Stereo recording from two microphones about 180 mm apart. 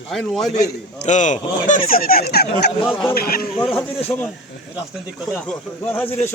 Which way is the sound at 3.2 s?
55° left (ahead or behind).